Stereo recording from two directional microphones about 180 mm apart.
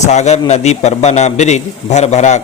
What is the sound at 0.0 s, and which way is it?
A man's voice, 40° left (ahead or behind).